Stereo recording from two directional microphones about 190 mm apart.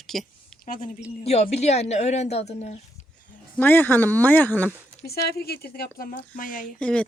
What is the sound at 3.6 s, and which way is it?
Speech, 10° left (ahead or behind).